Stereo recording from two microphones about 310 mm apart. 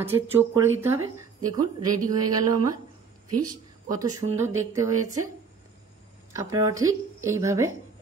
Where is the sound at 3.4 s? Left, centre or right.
Centre.